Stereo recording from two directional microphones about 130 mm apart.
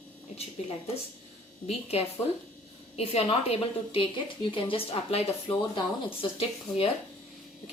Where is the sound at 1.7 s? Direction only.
50° left (ahead or behind).